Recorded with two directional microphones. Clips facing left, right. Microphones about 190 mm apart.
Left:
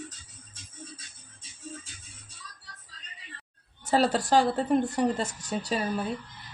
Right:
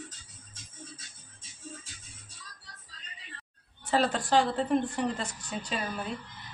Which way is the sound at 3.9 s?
40° left (ahead or behind).